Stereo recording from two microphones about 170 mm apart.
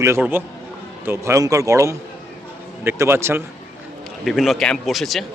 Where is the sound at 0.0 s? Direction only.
15° right (ahead or behind).